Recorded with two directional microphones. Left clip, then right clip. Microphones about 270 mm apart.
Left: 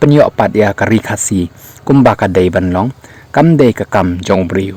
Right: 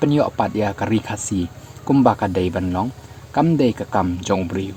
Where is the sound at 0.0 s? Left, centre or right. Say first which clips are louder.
Left 10 dB; left.